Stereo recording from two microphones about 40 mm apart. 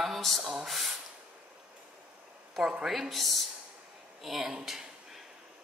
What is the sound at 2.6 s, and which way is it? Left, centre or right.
Speech, centre.